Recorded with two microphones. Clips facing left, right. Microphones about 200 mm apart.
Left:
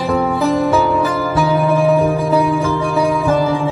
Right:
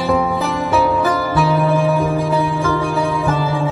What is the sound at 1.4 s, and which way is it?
Music, centre (ahead or behind).